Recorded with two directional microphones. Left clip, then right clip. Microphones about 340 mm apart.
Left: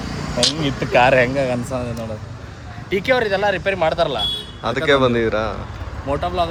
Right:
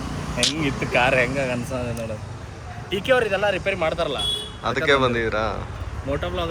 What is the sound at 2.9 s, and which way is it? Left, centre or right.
Speech, left.